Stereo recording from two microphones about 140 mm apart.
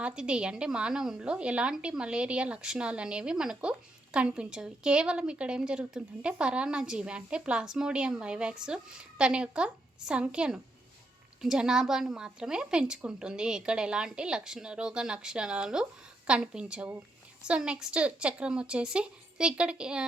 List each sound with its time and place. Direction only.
0.0 s a woman's voice: 5° right (ahead or behind)